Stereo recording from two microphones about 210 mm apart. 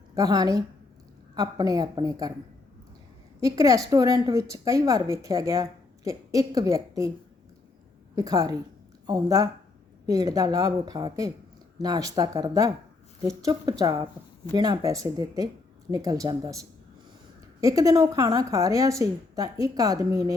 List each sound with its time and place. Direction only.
0.1 s a woman's voice: 15° right (ahead or behind)
3.4 s speech: 15° right (ahead or behind)
8.1 s speech: 15° right (ahead or behind)